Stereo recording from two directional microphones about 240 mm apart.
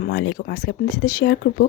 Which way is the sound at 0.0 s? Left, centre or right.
Left.